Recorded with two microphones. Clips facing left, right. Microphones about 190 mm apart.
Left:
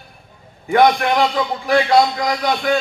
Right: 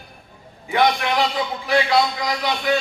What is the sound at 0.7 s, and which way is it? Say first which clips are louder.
A man's voice: left 5 dB; 50° left (ahead or behind).